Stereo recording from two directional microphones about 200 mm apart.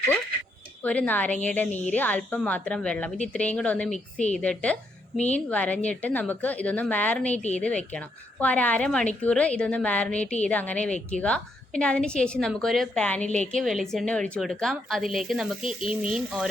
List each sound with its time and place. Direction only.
0.8 s a woman's voice: 5° left (ahead or behind)
3.9 s a woman's voice: 35° left (ahead or behind)
4.4 s a woman's voice: 5° left (ahead or behind)